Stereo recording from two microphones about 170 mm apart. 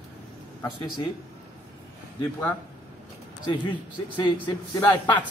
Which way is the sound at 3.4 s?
25° left (ahead or behind).